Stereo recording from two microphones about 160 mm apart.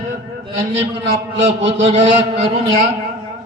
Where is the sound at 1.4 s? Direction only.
35° right (ahead or behind).